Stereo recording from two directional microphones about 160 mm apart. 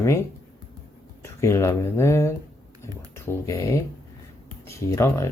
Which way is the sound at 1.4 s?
15° left (ahead or behind).